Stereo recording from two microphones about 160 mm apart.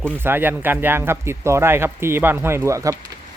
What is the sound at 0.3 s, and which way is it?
Speech, 15° right (ahead or behind).